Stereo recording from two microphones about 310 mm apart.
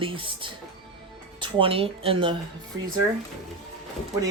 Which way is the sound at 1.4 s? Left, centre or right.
Centre.